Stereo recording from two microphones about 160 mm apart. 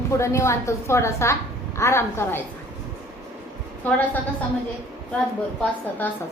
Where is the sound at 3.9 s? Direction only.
10° left (ahead or behind).